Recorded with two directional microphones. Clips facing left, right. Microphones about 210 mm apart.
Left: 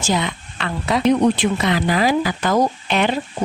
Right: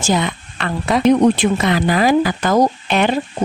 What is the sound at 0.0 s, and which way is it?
Speech, 50° right (ahead or behind).